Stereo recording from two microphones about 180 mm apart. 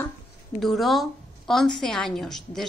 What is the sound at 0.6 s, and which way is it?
A woman's voice, centre (ahead or behind).